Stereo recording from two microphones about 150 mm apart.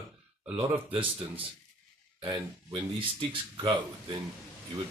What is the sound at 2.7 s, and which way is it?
Speech, 35° right (ahead or behind).